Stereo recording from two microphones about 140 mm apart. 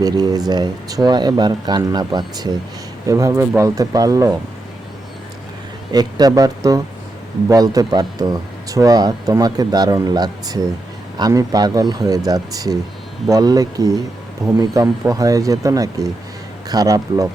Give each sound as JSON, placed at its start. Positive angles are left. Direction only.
{"t": 0.0, "sound": "speech", "side_deg": -30}
{"t": 5.9, "sound": "speech", "side_deg": -30}